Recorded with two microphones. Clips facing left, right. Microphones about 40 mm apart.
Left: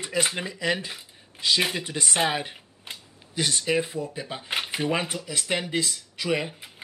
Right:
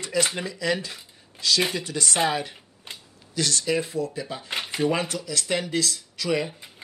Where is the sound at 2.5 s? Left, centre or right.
Centre.